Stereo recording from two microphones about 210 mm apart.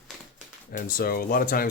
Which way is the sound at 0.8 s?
45° left (ahead or behind).